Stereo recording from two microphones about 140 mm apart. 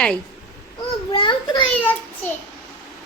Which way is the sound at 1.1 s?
35° left (ahead or behind).